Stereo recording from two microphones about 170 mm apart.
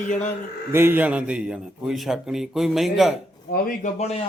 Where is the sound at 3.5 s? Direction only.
60° left (ahead or behind).